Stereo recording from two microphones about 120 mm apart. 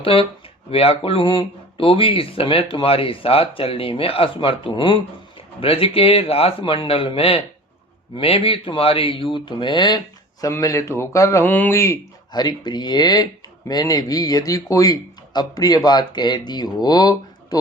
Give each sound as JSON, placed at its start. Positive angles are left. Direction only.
{"t": 0.0, "sound": "speech", "side_deg": 50}
{"t": 10.4, "sound": "a man's voice", "side_deg": 25}
{"t": 12.3, "sound": "speech", "side_deg": 35}